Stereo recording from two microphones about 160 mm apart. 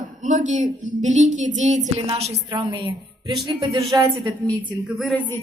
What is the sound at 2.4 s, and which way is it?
A woman's voice, 30° right (ahead or behind).